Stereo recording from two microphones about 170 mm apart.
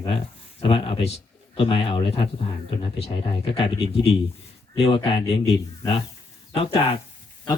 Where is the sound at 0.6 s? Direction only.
30° left (ahead or behind).